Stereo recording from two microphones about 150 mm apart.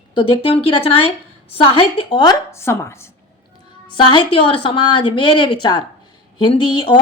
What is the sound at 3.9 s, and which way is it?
A woman's voice, 35° left (ahead or behind).